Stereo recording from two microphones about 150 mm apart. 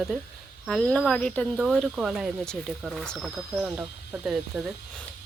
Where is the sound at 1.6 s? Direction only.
Centre (ahead or behind).